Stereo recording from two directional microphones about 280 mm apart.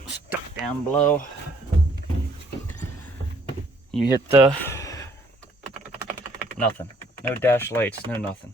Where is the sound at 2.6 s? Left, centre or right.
Centre.